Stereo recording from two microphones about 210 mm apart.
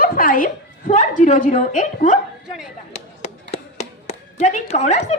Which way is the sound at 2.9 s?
30° left (ahead or behind).